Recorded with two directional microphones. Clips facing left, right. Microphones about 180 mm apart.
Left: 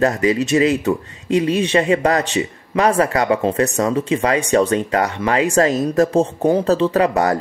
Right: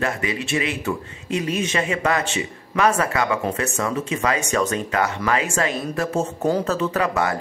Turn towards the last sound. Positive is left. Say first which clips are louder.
# left 6 dB
turn(degrees=35)  # may be behind; listen again after turning